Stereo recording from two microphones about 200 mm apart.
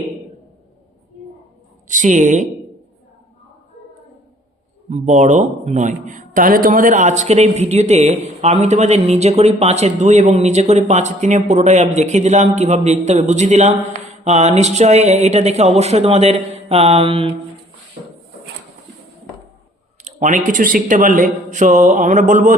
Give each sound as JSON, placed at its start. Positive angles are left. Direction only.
{"t": 1.9, "sound": "speech", "side_deg": -40}
{"t": 4.9, "sound": "speech", "side_deg": -35}
{"t": 20.1, "sound": "speech", "side_deg": -35}